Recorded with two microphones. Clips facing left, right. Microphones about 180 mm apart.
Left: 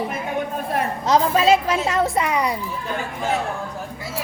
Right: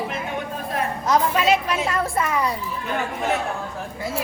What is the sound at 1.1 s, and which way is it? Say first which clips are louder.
A child's voice: left 3 dB; 30° left (ahead or behind).